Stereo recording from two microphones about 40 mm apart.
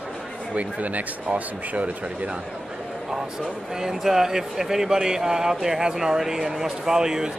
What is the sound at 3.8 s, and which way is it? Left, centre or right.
Speech, centre.